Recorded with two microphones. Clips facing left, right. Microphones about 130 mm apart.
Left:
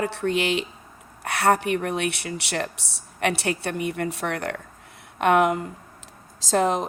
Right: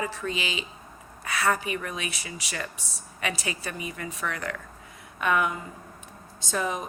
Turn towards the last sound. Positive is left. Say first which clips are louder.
# left 8 dB
turn(degrees=90)